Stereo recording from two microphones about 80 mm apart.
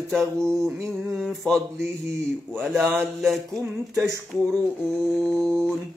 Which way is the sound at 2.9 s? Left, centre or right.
Centre.